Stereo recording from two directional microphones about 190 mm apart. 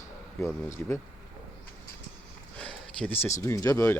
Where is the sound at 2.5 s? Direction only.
5° left (ahead or behind).